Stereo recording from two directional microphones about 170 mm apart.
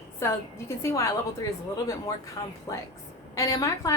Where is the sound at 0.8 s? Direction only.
15° left (ahead or behind).